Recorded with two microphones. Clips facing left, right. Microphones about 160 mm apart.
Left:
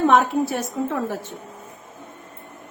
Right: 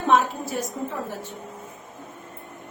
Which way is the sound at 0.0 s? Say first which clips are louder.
Left 4 dB; 70° left (ahead or behind).